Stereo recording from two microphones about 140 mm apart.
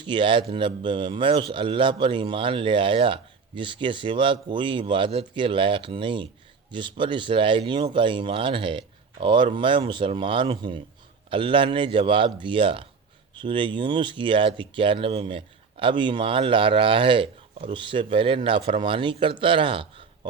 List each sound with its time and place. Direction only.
0.0 s speech: 35° right (ahead or behind)